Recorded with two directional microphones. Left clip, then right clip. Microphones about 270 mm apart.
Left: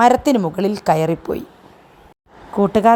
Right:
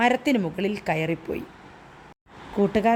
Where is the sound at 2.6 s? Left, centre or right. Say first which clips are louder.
Left 8 dB; centre.